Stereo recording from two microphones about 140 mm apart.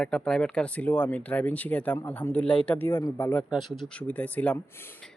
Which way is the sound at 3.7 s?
5° left (ahead or behind).